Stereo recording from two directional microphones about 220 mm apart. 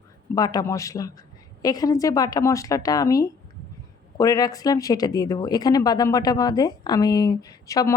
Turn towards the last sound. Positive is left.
turn(degrees=15)  # may be behind; listen again after turning